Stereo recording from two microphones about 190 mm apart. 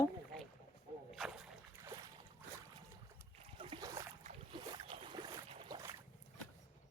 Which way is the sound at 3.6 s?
25° right (ahead or behind).